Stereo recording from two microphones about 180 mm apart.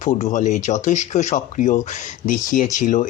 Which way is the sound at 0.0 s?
40° left (ahead or behind).